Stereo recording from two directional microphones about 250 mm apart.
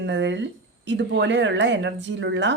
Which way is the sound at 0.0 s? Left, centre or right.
Right.